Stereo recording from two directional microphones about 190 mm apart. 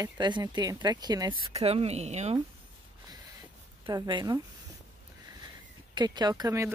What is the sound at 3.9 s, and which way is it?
Speech, 20° right (ahead or behind).